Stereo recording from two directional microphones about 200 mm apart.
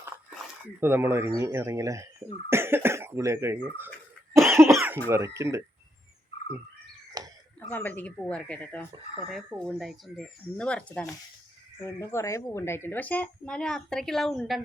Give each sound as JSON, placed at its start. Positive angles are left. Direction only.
{"t": 0.8, "sound": "speech", "side_deg": -10}
{"t": 4.5, "sound": "cough", "side_deg": -15}
{"t": 5.0, "sound": "speech", "side_deg": -15}
{"t": 7.2, "sound": "a sound", "side_deg": -20}
{"t": 7.6, "sound": "speech", "side_deg": 10}